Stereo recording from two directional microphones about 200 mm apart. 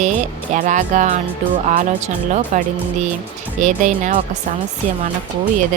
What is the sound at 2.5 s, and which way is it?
Speech, 40° right (ahead or behind).